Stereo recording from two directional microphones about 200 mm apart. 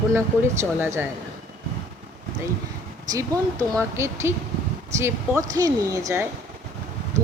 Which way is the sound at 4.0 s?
15° right (ahead or behind).